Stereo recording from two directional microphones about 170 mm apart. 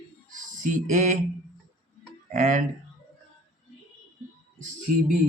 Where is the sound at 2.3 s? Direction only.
45° right (ahead or behind).